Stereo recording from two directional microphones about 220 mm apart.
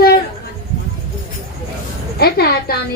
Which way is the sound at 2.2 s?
45° left (ahead or behind).